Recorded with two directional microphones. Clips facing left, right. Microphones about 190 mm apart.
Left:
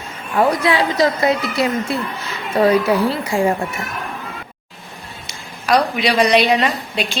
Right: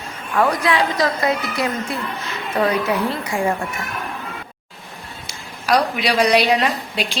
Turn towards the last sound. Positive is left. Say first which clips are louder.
# left 1 dB
turn(degrees=-5)  # may be behind; listen again after turning